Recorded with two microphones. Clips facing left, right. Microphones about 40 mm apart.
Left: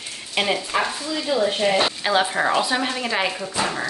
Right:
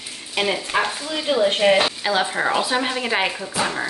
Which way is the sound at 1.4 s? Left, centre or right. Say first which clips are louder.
Right 5 dB; right.